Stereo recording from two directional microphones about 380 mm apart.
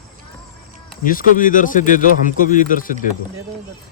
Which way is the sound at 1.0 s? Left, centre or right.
Left.